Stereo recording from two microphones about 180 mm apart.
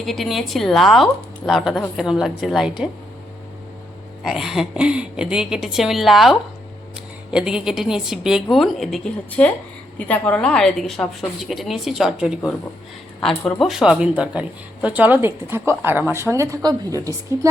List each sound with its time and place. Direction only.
0.0 s a woman's voice: centre (ahead or behind)
4.2 s a woman's voice: centre (ahead or behind); by 17.5 s 20° right (ahead or behind)